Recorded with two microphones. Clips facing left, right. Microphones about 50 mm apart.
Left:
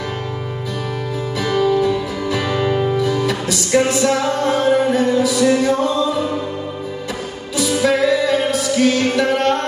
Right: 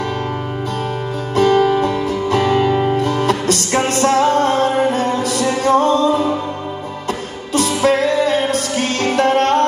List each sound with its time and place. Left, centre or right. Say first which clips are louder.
1.3 s music: right 4 dB; right
2.6 s music: right 2 dB; right
2.9 s music: right 2 dB; right
7.8 s music: even; right